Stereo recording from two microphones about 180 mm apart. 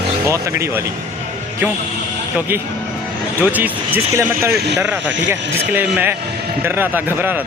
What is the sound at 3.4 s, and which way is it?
Speech, 10° right (ahead or behind).